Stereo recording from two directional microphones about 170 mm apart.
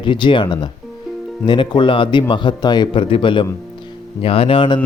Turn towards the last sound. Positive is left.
turn(degrees=30)  # may be behind; listen again after turning